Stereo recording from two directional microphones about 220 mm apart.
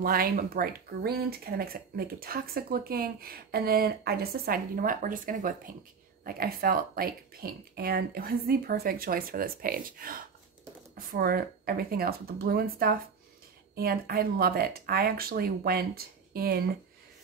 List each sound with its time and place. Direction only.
0.0 s speech: 40° right (ahead or behind)